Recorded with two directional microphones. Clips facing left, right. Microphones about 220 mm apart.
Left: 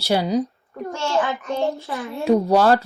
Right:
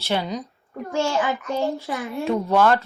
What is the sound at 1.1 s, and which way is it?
Speech, 15° right (ahead or behind).